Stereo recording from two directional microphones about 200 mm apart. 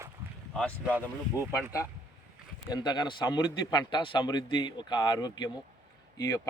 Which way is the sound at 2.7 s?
20° left (ahead or behind).